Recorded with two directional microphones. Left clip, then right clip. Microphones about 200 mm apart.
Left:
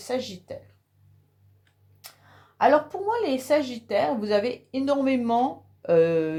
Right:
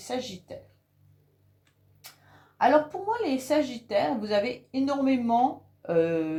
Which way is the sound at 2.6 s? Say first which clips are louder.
Left 2 dB; 40° left (ahead or behind).